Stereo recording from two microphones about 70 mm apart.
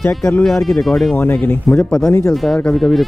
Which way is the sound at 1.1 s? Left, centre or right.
Left.